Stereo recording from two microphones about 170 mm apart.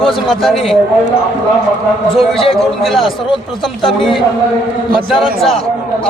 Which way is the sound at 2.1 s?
Centre (ahead or behind).